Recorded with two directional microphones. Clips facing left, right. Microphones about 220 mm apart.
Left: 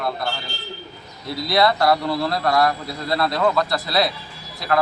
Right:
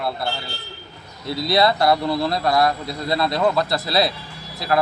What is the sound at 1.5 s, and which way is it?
Speech, 25° right (ahead or behind).